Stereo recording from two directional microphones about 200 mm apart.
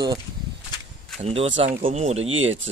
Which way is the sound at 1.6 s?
40° right (ahead or behind).